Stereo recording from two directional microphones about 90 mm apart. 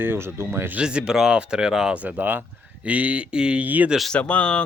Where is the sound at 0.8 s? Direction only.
10° right (ahead or behind).